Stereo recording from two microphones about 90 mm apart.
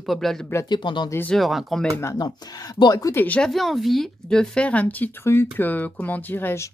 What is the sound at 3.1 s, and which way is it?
Speech, 25° left (ahead or behind).